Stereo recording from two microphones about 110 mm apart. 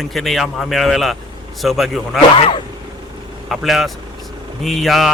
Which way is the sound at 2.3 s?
60° left (ahead or behind).